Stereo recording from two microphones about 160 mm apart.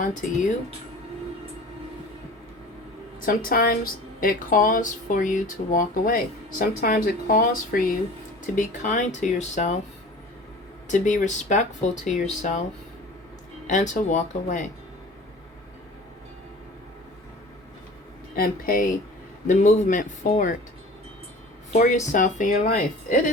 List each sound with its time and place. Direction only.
0.0 s speech: 50° left (ahead or behind)
3.2 s a woman's voice: 70° left (ahead or behind); by 9.7 s 50° left (ahead or behind)
10.8 s speech: 50° left (ahead or behind)
13.7 s speech: 50° left (ahead or behind)
18.3 s speech: 60° left (ahead or behind)
19.5 s speech: 50° left (ahead or behind)
21.7 s speech: 50° left (ahead or behind)